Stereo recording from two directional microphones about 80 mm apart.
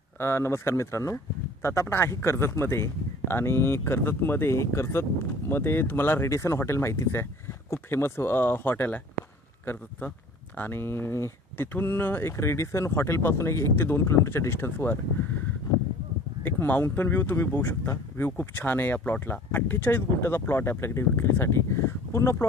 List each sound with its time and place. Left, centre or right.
0.2 s speech: left
16.4 s speech: left